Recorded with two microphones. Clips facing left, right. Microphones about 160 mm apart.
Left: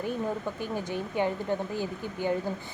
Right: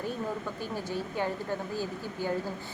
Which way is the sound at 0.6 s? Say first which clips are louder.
Left 2 dB; 15° left (ahead or behind).